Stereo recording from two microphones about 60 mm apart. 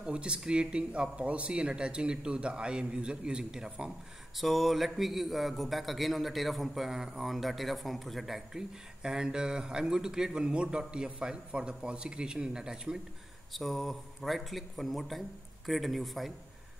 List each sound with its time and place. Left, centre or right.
0.0 s speech: centre
4.4 s a man's voice: centre
13.5 s a man's voice: centre